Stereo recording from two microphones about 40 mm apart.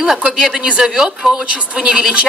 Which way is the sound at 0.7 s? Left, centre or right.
Right.